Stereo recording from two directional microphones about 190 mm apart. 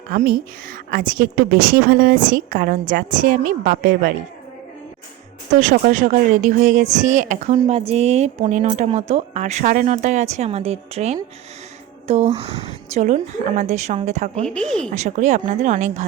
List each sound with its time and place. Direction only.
0.9 s a woman's voice: 50° right (ahead or behind)
5.5 s a woman's voice: 45° right (ahead or behind)